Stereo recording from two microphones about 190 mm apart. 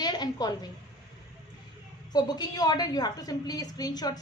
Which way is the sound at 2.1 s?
20° left (ahead or behind).